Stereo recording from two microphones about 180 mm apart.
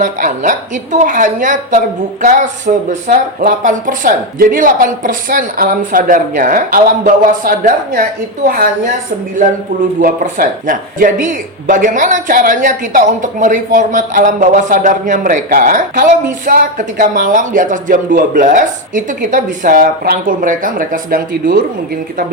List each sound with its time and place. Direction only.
0.0 s speech: 45° right (ahead or behind)
10.0 s speech: 50° right (ahead or behind)